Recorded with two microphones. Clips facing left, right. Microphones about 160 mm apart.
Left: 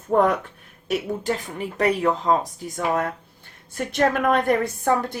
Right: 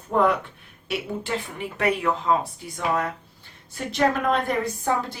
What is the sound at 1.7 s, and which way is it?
Speech, 35° left (ahead or behind).